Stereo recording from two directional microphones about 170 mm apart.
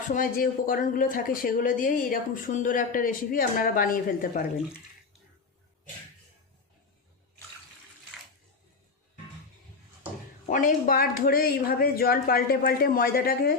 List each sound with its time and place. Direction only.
0.1 s speech: 55° left (ahead or behind)
10.5 s speech: 50° left (ahead or behind)